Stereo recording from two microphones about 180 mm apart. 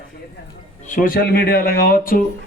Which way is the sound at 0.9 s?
50° left (ahead or behind).